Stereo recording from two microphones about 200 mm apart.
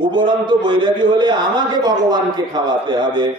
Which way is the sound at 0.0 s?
20° right (ahead or behind).